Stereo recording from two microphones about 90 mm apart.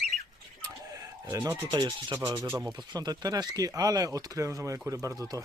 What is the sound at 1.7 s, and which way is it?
Speech, 60° right (ahead or behind).